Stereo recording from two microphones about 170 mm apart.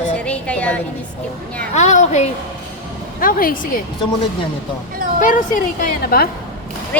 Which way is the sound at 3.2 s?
55° left (ahead or behind).